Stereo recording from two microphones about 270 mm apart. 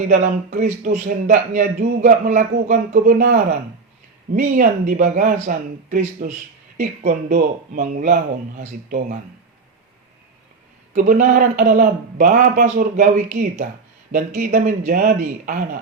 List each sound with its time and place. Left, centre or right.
0.1 s speech: right
10.9 s speech: right